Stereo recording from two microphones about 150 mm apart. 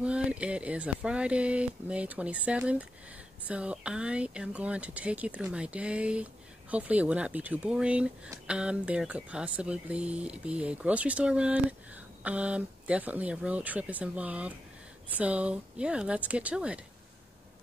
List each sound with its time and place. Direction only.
0.0 s speech: 5° right (ahead or behind)